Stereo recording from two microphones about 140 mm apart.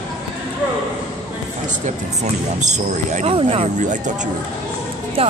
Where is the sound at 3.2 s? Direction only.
45° right (ahead or behind).